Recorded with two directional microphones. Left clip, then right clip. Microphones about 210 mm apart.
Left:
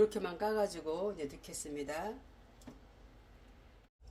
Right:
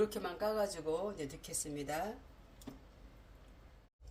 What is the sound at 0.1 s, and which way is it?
Speech, 30° left (ahead or behind).